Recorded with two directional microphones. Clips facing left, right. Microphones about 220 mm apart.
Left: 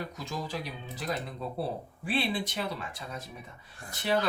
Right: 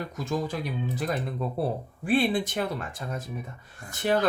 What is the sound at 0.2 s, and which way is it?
Speech, 50° right (ahead or behind).